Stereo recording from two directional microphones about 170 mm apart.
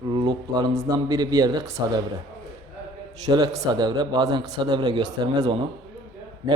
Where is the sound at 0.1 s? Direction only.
25° right (ahead or behind).